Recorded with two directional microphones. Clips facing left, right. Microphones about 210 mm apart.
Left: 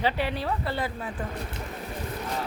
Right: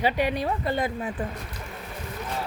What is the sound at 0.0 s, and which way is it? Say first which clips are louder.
Speech: right 3 dB; 15° right (ahead or behind).